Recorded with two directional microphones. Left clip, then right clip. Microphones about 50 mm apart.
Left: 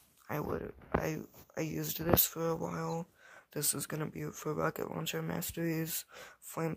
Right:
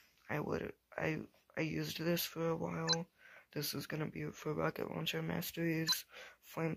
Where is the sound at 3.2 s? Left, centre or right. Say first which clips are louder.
Left 4 dB; centre.